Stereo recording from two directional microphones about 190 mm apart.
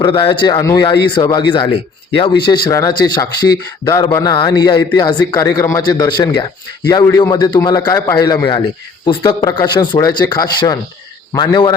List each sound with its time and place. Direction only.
0.0 s speech: 25° left (ahead or behind)